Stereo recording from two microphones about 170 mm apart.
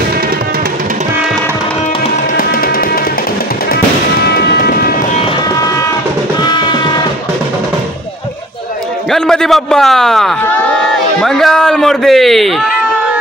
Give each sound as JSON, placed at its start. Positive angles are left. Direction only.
{"t": 4.2, "sound": "train", "side_deg": 70}
{"t": 6.4, "sound": "music", "side_deg": 25}
{"t": 9.1, "sound": "a sound", "side_deg": 5}